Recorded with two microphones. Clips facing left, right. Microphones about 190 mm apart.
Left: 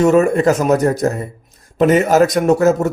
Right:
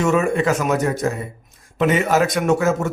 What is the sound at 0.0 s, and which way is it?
A man's voice, 40° left (ahead or behind).